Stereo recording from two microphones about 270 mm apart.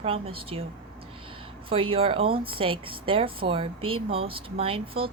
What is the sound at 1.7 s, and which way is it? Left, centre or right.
Speech, centre.